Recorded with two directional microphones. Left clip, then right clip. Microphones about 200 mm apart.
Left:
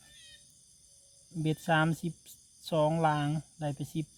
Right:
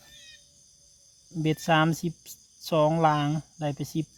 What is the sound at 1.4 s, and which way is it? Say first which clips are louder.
Speech: right 5 dB; 30° right (ahead or behind).